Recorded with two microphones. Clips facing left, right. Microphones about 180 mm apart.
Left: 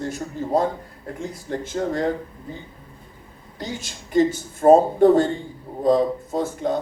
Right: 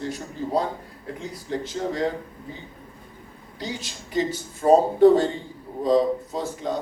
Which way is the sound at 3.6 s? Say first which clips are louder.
Left 1 dB; 45° left (ahead or behind).